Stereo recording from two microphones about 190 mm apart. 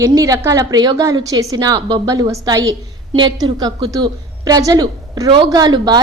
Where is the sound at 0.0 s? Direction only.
20° right (ahead or behind).